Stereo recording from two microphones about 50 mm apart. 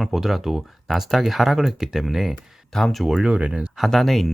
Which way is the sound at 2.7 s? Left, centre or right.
Centre.